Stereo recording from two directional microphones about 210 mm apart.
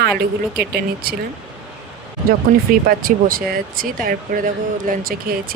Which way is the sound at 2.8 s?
45° right (ahead or behind).